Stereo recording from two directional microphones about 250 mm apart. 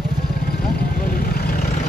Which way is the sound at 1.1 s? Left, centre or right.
Left.